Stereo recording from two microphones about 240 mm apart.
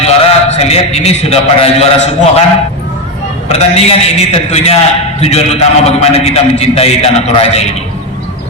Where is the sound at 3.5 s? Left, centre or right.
Left.